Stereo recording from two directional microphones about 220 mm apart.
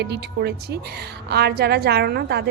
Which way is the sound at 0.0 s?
50° right (ahead or behind).